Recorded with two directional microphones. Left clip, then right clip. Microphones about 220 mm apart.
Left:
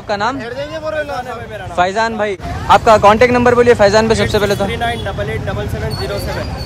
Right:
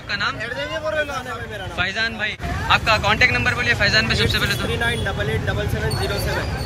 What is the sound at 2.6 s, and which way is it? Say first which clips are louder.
A man's voice: left 10 dB; 25° left (ahead or behind).